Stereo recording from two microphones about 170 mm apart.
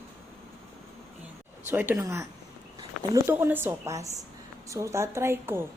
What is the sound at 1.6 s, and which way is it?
A woman's voice, 10° right (ahead or behind).